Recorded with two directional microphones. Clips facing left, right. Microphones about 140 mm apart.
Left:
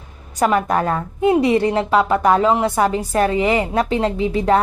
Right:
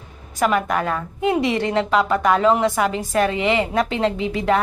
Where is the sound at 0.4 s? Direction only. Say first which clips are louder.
Left 3 dB; 35° left (ahead or behind).